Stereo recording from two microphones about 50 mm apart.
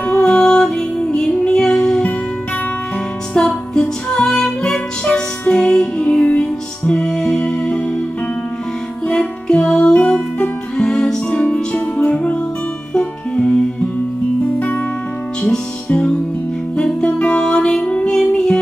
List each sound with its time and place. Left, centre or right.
0.0 s music: left
3.3 s music: centre
9.0 s music: centre
15.4 s music: centre